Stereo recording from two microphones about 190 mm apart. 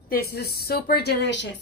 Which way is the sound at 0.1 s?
55° left (ahead or behind).